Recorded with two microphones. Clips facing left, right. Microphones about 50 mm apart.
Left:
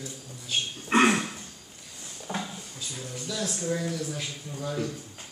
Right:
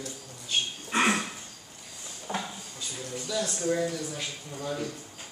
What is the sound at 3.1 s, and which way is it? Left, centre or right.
Speech, centre.